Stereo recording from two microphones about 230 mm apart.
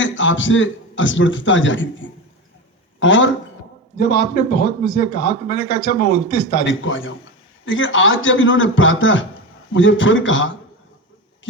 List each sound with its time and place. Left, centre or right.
0.0 s a man's voice: left
3.9 s a man's voice: left